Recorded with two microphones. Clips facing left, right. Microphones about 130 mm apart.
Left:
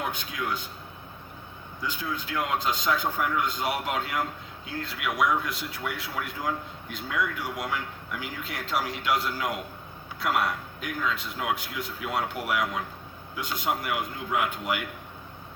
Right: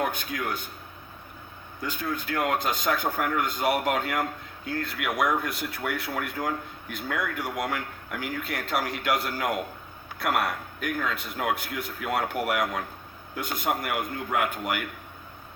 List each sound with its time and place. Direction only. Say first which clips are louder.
0.0 s a man's voice: right 3 dB; 55° right (ahead or behind)
1.8 s a man's voice: right 2 dB; 55° right (ahead or behind)